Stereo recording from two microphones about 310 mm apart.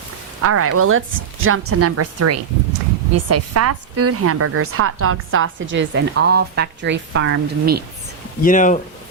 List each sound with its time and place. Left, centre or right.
0.4 s a woman's voice: right
8.4 s speech: left